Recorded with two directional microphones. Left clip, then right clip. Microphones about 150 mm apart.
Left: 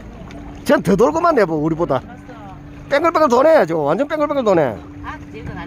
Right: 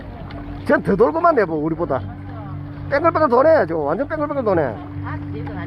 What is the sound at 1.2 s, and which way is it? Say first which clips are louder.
Speech: left 1 dB; 90° left.